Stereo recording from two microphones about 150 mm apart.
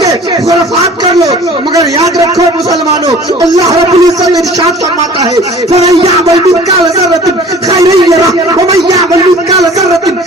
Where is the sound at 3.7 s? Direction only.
45° right (ahead or behind).